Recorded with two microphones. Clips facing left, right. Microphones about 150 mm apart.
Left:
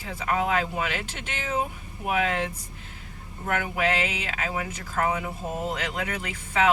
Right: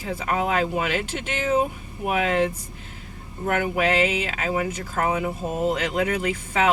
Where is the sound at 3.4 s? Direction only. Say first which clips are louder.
Right 4 dB; 25° right (ahead or behind).